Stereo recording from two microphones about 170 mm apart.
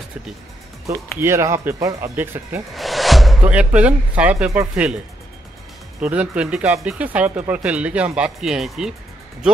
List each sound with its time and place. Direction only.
0.8 s speech: 15° right (ahead or behind)
2.7 s speech: centre (ahead or behind)
5.9 s speech: 5° right (ahead or behind)